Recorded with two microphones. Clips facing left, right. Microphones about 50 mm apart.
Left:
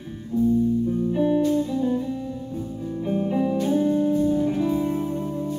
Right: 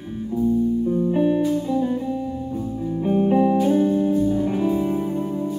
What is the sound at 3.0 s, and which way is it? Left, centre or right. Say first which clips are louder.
Music: right 6 dB; right.